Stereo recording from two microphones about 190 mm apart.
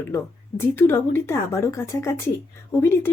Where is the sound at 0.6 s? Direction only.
10° left (ahead or behind).